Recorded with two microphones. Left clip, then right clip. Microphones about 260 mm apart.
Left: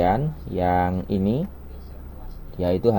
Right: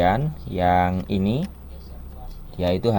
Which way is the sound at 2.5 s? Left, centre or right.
Right.